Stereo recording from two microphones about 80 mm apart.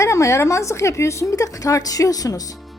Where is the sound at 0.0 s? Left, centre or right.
Left.